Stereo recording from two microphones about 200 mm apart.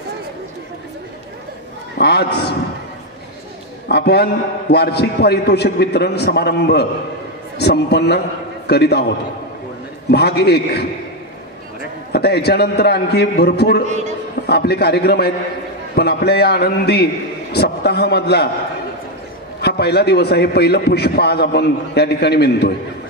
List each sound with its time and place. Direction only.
2.0 s a man's voice: 55° left (ahead or behind)
3.9 s a man's voice: 55° left (ahead or behind)
10.1 s a man's voice: 55° left (ahead or behind)
12.1 s a man's voice: 55° left (ahead or behind)
13.8 s a man's voice: 35° right (ahead or behind)
14.4 s a man's voice: 55° left (ahead or behind)
19.6 s a man's voice: 55° left (ahead or behind)